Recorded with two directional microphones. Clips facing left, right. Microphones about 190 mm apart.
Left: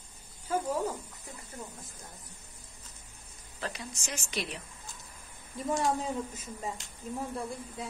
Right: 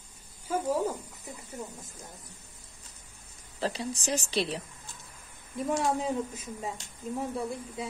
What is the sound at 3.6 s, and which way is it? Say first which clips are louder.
Speech: right 8 dB; 30° right (ahead or behind).